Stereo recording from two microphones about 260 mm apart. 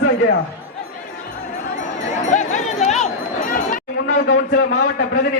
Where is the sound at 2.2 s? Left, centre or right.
Left.